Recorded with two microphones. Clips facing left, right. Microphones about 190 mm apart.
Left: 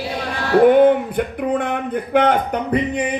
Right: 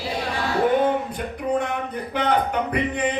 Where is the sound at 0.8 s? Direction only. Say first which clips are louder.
Left 8 dB; 60° left (ahead or behind).